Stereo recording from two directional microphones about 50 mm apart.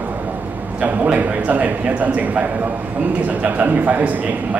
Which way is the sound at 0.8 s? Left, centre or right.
Right.